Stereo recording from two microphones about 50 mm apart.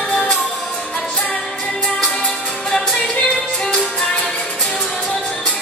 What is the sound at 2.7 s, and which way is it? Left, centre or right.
Music, centre.